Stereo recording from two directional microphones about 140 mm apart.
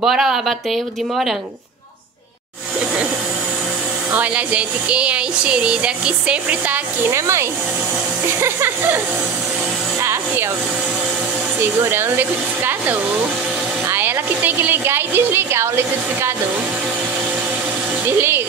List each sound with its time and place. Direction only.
0.0 s speech: 5° right (ahead or behind)
4.1 s speech: 10° right (ahead or behind)
11.6 s speech: 15° right (ahead or behind)